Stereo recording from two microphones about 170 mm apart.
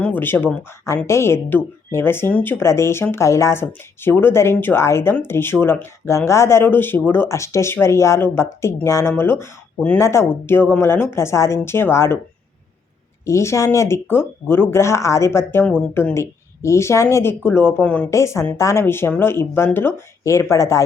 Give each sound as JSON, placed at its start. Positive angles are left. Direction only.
{"t": 0.0, "sound": "speech", "side_deg": 10}
{"t": 13.2, "sound": "speech", "side_deg": 15}